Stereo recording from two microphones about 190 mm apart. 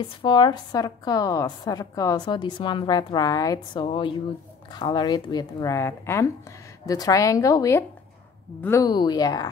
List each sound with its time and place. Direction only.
0.2 s a woman's voice: 25° left (ahead or behind)